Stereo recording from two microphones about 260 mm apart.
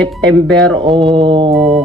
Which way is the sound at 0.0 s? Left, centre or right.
Centre.